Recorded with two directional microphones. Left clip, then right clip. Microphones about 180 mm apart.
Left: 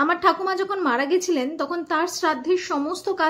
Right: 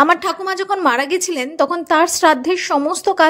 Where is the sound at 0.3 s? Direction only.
40° right (ahead or behind).